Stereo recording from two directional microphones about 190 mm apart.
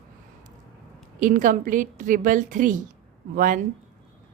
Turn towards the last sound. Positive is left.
turn(degrees=-45)  # may be behind; listen again after turning